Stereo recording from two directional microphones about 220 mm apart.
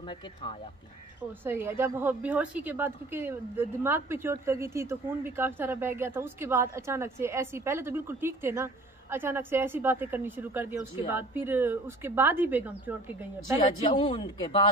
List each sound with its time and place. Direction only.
0.1 s a man's voice: 25° left (ahead or behind)
1.4 s a woman's voice: 10° right (ahead or behind)
13.7 s a man's voice: 25° left (ahead or behind)